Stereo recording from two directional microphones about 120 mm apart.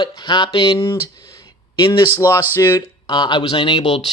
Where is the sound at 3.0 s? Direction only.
35° left (ahead or behind).